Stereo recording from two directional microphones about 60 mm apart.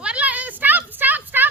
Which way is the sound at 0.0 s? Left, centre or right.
Right.